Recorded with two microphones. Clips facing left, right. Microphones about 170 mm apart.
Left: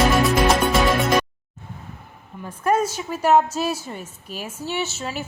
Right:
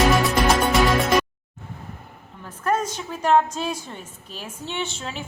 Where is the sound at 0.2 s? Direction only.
Centre (ahead or behind).